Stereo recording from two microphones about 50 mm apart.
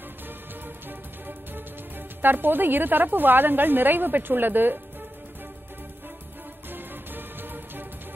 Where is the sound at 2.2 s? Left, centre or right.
Right.